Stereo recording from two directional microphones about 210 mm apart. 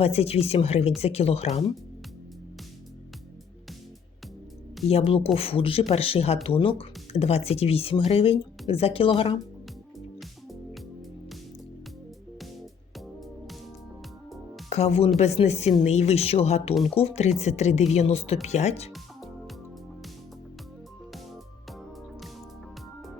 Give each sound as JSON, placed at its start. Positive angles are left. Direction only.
{"t": 0.0, "sound": "speech", "side_deg": 30}
{"t": 4.9, "sound": "speech", "side_deg": 30}
{"t": 14.7, "sound": "speech", "side_deg": 30}